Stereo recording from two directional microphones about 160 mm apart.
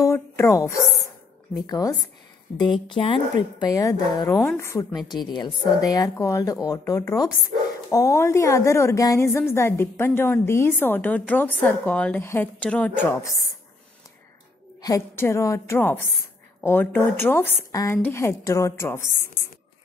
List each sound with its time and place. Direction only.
0.0 s a woman's voice: 20° left (ahead or behind)
14.8 s a woman's voice: 20° left (ahead or behind)